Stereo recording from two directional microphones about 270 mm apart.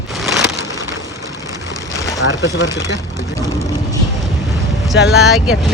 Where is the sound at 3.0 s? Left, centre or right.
Centre.